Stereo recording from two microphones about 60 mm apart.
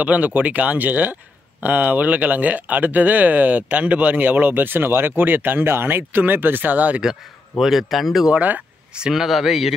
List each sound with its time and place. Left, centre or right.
0.0 s speech: right
7.0 s speech: centre
8.3 s speech: right
9.1 s speech: centre